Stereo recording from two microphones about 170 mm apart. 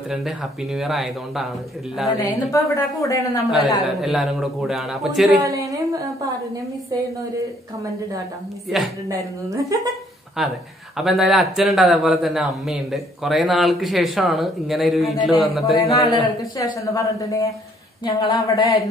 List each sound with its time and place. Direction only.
0.1 s speech: centre (ahead or behind)
2.2 s speech: 20° left (ahead or behind)
3.4 s speech: centre (ahead or behind)
5.4 s speech: 20° right (ahead or behind)
9.1 s speech: 20° right (ahead or behind)
10.4 s speech: centre (ahead or behind)
15.7 s speech: 25° left (ahead or behind)